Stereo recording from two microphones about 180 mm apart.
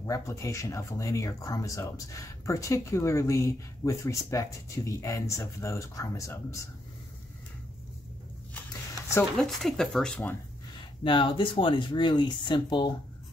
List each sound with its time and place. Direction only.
0.0 s speech: 15° left (ahead or behind)
9.4 s speech: centre (ahead or behind)
11.1 s speech: 25° left (ahead or behind)